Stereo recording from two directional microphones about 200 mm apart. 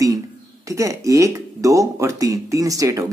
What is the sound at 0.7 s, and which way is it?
Speech, 15° right (ahead or behind).